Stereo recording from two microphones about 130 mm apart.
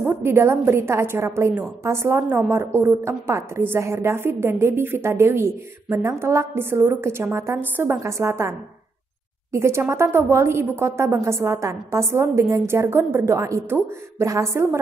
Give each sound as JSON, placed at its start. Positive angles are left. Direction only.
{"t": 0.0, "sound": "a woman's voice", "side_deg": -15}